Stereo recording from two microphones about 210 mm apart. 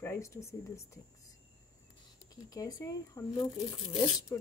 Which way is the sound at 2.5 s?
15° left (ahead or behind).